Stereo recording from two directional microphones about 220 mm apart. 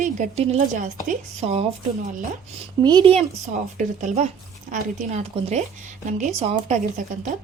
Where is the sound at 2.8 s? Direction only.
20° right (ahead or behind).